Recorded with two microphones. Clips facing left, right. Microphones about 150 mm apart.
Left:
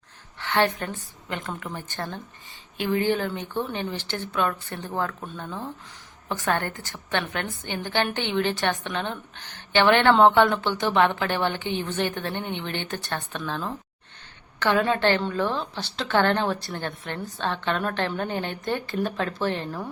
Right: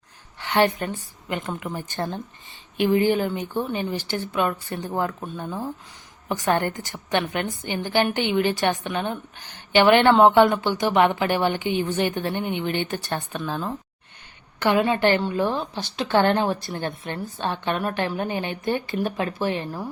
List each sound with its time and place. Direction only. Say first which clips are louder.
0.3 s a woman's voice: right 3 dB; 15° right (ahead or behind)